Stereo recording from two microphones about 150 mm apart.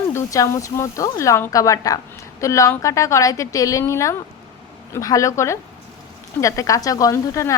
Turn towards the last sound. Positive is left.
turn(degrees=20)  # may be behind; listen again after turning